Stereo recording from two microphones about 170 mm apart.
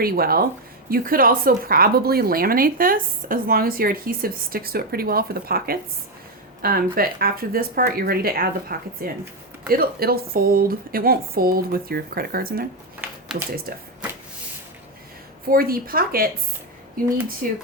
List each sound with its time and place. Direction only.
0.0 s a woman's voice: 60° right (ahead or behind)
13.7 s a woman's voice: 65° right (ahead or behind)
15.4 s a woman's voice: 60° right (ahead or behind)
17.4 s a woman's voice: 55° right (ahead or behind)